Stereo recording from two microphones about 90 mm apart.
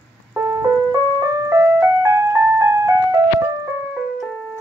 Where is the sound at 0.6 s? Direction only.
40° right (ahead or behind).